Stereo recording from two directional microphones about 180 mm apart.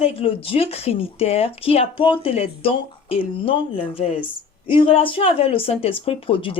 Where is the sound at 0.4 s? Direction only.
30° left (ahead or behind).